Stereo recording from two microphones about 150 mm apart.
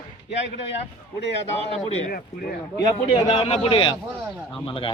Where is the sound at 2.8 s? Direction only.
25° left (ahead or behind).